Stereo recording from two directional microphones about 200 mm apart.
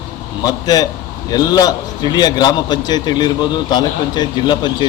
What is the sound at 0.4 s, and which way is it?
A man's voice, 20° left (ahead or behind).